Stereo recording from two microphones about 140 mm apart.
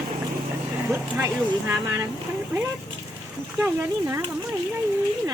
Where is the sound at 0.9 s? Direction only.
20° right (ahead or behind).